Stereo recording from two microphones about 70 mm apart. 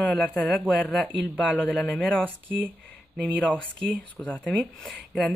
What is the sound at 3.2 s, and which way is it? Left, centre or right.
Speech, centre.